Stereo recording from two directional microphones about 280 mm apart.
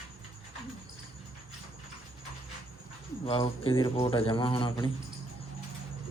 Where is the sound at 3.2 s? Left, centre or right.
Centre.